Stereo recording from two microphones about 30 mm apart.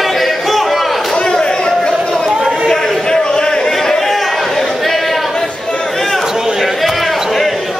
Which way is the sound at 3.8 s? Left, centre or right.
Centre.